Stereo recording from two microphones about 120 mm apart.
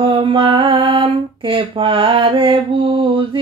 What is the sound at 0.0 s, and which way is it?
Mantra, 45° right (ahead or behind).